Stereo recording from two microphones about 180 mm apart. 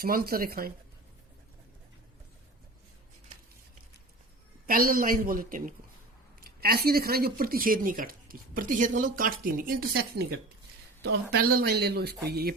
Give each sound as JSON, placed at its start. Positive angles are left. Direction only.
{"t": 0.0, "sound": "speech", "side_deg": -55}
{"t": 4.6, "sound": "speech", "side_deg": -55}